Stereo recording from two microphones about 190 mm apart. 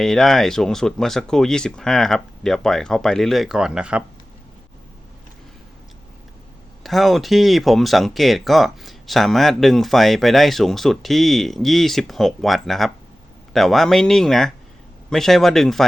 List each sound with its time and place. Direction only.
0.0 s speech: centre (ahead or behind)
6.8 s speech: centre (ahead or behind)